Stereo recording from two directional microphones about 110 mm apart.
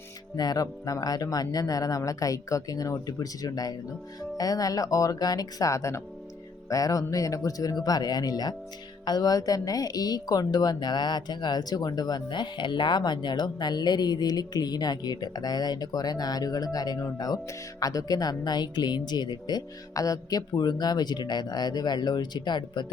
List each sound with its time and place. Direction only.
0.3 s a woman's voice: 35° left (ahead or behind)